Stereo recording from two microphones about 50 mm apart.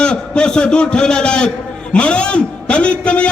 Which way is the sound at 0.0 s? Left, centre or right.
Centre.